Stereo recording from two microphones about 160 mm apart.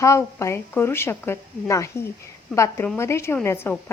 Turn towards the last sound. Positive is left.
turn(degrees=15)  # may be behind; listen again after turning